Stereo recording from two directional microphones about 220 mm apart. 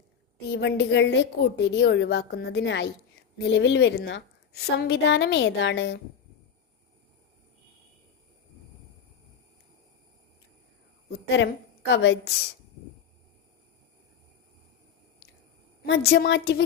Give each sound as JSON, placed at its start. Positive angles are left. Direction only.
{"t": 0.5, "sound": "a woman's voice", "side_deg": 55}
{"t": 11.9, "sound": "a woman's voice", "side_deg": 55}
{"t": 15.8, "sound": "a woman's voice", "side_deg": 45}